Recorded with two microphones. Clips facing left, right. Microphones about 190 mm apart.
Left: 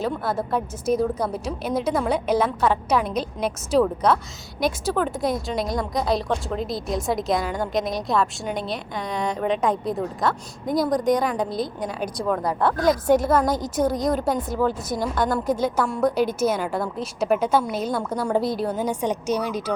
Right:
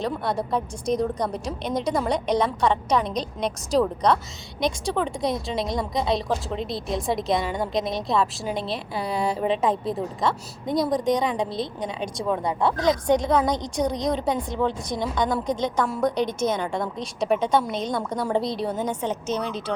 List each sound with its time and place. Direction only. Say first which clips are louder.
0.0 s a woman's voice: left 1 dB; centre (ahead or behind)
12.5 s speech: left 1 dB; 20° right (ahead or behind)
12.7 s a woman's voice: left 3 dB; 5° left (ahead or behind)